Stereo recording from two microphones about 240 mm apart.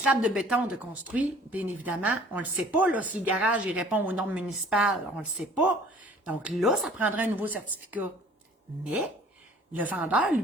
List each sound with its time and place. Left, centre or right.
0.0 s speech: centre
8.8 s a woman's voice: centre